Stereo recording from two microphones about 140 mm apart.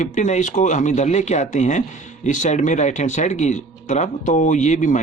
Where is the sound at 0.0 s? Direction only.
60° left (ahead or behind).